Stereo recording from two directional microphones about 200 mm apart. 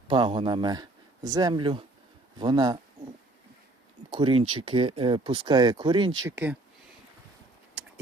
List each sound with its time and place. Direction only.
0.1 s speech: 25° right (ahead or behind)
4.1 s speech: 25° right (ahead or behind)
6.2 s speech: 10° right (ahead or behind)